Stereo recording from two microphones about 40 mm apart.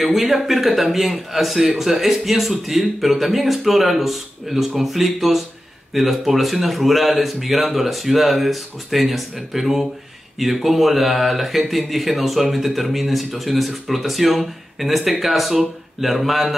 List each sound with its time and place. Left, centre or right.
0.0 s speech: centre